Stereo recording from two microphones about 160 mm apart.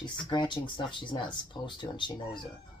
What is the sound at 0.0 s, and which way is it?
Speech, 30° left (ahead or behind).